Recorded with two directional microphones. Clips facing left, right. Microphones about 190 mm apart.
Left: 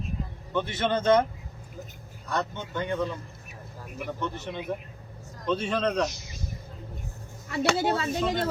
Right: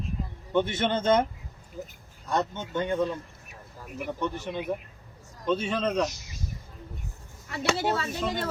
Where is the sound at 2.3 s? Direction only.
20° right (ahead or behind).